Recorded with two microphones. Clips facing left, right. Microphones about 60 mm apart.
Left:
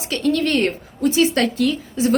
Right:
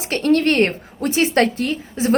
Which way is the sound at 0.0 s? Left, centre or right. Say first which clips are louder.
Right 3 dB; right.